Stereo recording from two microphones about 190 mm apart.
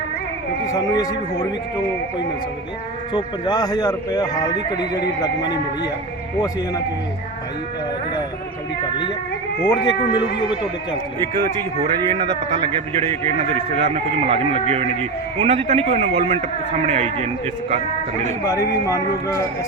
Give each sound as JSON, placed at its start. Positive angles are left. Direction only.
{"t": 0.7, "sound": "speech", "side_deg": 20}
{"t": 3.1, "sound": "speech", "side_deg": 25}
{"t": 9.6, "sound": "speech", "side_deg": 25}
{"t": 11.9, "sound": "a man's voice", "side_deg": -35}
{"t": 18.3, "sound": "speech", "side_deg": 15}